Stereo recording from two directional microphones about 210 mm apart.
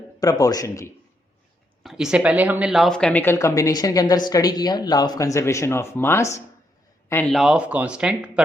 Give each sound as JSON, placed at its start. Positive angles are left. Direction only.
{"t": 0.2, "sound": "speech", "side_deg": 15}
{"t": 1.8, "sound": "speech", "side_deg": 0}